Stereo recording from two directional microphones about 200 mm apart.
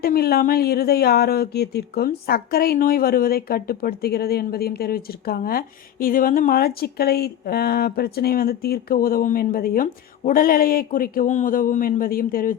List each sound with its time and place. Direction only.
0.0 s speech: 50° left (ahead or behind)